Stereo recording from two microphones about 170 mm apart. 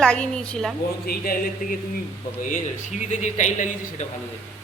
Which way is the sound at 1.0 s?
60° left (ahead or behind).